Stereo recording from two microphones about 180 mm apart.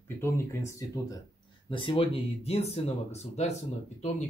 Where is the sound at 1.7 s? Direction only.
30° left (ahead or behind).